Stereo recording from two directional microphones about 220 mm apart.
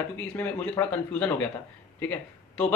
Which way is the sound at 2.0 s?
10° left (ahead or behind).